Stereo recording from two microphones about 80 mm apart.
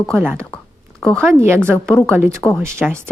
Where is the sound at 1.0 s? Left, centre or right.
Centre.